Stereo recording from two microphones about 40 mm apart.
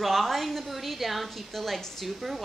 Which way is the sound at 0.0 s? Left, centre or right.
Centre.